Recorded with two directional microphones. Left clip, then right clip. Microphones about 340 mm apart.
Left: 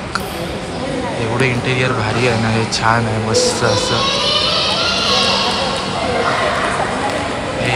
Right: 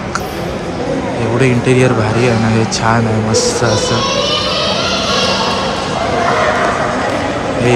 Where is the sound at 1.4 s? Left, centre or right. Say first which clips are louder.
Right 6 dB; centre.